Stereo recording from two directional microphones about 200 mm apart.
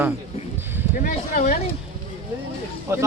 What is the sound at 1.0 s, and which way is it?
Speech, 40° left (ahead or behind).